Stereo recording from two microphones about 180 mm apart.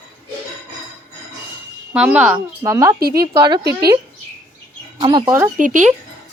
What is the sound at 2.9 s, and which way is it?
Speech, 55° right (ahead or behind).